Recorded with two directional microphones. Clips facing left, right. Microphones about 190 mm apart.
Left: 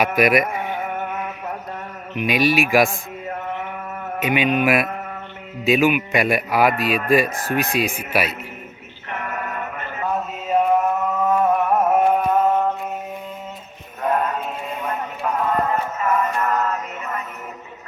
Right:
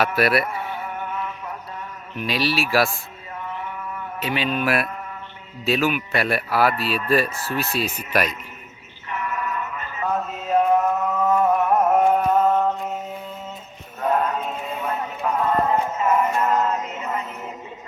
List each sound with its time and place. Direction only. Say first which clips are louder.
0.2 s a man's voice: left 4 dB; 15° left (ahead or behind)
0.8 s music: left 4 dB; 55° left (ahead or behind)
2.1 s a man's voice: left 5 dB; 15° left (ahead or behind)
2.9 s a sound: left 7 dB; 50° left (ahead or behind)
4.2 s a man's voice: left 5 dB; 15° left (ahead or behind)
9.0 s music: right 1 dB; 55° left (ahead or behind)
10.4 s music: left 1 dB; 10° left (ahead or behind)
14.0 s mantra: even; 5° left (ahead or behind)
14.8 s music: even; 5° right (ahead or behind); by 17.2 s 20° right (ahead or behind)